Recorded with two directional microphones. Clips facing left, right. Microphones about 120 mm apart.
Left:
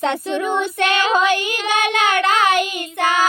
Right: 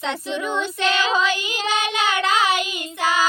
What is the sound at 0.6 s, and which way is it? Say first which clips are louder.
Child singing: left 3 dB; 55° left (ahead or behind).